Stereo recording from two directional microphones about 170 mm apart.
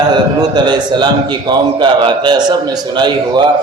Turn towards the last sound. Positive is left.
turn(degrees=-25)  # may be behind; listen again after turning